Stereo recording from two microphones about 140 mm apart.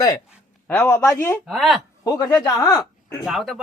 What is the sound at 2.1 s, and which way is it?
Speech, 25° left (ahead or behind).